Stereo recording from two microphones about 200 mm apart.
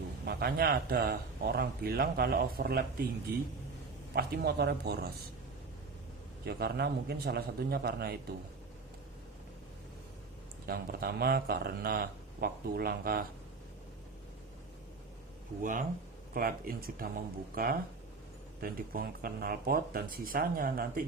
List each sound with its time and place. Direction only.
0.3 s speech: 50° right (ahead or behind)
4.1 s speech: 50° right (ahead or behind)
6.4 s speech: 55° right (ahead or behind)
10.7 s speech: 50° right (ahead or behind)
15.6 s speech: 40° right (ahead or behind)